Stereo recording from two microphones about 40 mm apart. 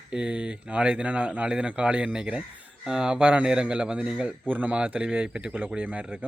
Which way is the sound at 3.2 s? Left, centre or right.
Right.